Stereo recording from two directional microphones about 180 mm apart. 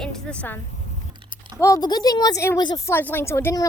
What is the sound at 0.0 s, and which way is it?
A woman's voice, 10° left (ahead or behind).